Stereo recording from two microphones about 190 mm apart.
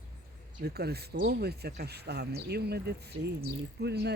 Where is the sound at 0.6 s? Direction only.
55° right (ahead or behind).